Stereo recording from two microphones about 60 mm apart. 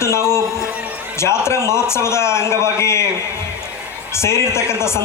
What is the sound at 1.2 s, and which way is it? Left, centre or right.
A man's voice, left.